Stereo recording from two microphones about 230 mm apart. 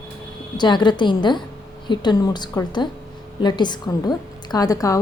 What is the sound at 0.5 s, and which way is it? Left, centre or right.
A woman's voice, centre.